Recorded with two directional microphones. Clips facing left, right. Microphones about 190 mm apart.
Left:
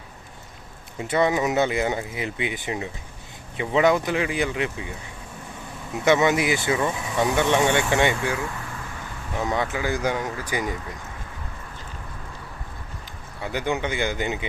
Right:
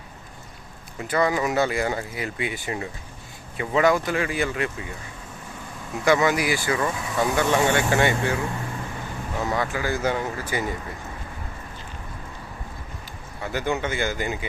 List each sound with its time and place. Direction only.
0.9 s speech: 25° left (ahead or behind)
6.1 s speech: 20° left (ahead or behind)
9.4 s speech: 20° left (ahead or behind)
13.4 s speech: 15° left (ahead or behind)